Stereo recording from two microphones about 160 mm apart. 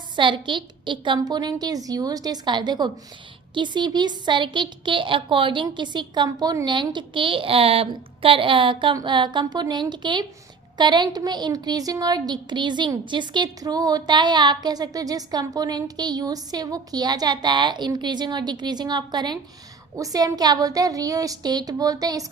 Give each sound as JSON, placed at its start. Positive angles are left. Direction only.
{"t": 0.2, "sound": "a woman's voice", "side_deg": -30}